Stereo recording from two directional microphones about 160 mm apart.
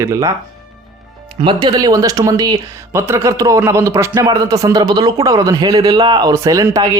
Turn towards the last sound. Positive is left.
turn(degrees=-20)  # may be behind; listen again after turning